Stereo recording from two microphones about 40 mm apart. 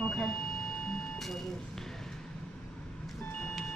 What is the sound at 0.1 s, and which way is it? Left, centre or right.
Speech, centre.